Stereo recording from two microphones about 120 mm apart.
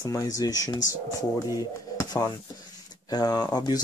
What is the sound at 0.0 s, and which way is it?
Speech, 30° left (ahead or behind).